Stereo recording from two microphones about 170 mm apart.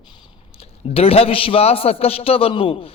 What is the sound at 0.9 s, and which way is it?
A man's voice, 35° left (ahead or behind).